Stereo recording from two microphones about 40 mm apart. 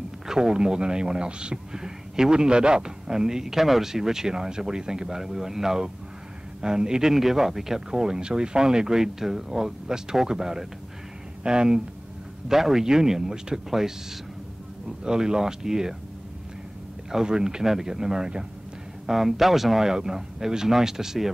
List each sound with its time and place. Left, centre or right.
0.3 s speech: centre
12.4 s speech: centre
17.1 s speech: centre
19.0 s speech: centre